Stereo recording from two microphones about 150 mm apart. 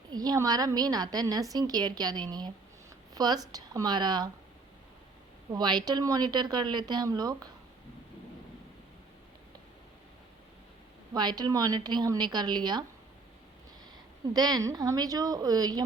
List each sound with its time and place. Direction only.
0.1 s a woman's voice: 25° right (ahead or behind)
5.5 s a woman's voice: 30° right (ahead or behind)
11.1 s a woman's voice: 25° right (ahead or behind)
14.3 s a woman's voice: 25° right (ahead or behind)